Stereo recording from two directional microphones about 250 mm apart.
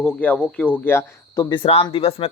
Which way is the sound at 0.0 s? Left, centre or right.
Centre.